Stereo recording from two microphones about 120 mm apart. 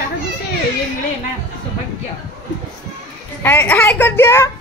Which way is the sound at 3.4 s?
20° left (ahead or behind).